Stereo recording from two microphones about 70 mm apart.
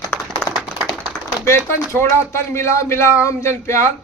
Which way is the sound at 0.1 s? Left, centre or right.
Left.